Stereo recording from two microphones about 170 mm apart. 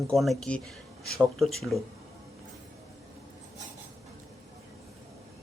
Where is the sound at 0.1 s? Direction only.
Centre (ahead or behind).